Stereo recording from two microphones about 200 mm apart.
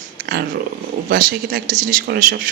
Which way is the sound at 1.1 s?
45° right (ahead or behind).